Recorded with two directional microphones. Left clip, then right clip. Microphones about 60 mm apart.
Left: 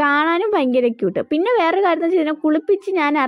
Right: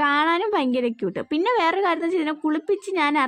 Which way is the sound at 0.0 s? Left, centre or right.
Left.